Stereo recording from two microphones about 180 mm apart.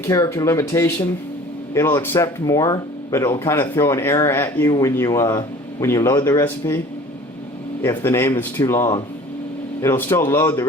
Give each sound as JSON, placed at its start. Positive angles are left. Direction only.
{"t": 0.0, "sound": "speech", "side_deg": 20}
{"t": 7.8, "sound": "speech", "side_deg": 15}